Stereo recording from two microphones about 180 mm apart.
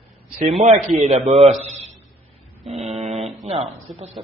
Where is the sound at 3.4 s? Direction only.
35° right (ahead or behind).